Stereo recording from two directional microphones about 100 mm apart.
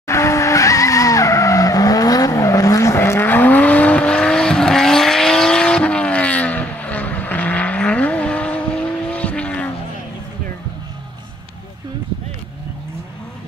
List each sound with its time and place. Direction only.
0.0 s vehicle: 30° left (ahead or behind); by 9.7 s 15° left (ahead or behind)